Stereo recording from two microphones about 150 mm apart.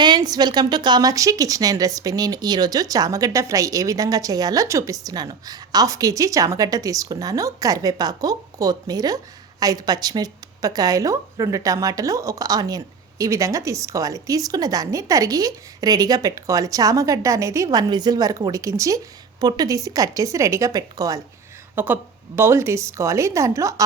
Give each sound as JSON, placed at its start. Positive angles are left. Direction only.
{"t": 0.0, "sound": "a woman's voice", "side_deg": -30}